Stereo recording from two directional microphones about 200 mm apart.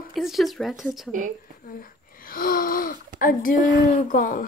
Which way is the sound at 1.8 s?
45° left (ahead or behind).